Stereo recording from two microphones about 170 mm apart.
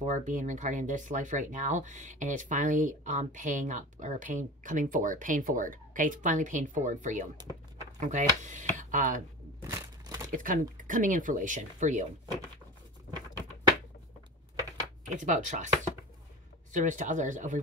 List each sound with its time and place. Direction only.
0.0 s speech: 45° right (ahead or behind)
9.6 s a sound: 20° right (ahead or behind)
10.3 s speech: 55° right (ahead or behind)
15.1 s speech: 45° right (ahead or behind)
16.7 s speech: 45° right (ahead or behind)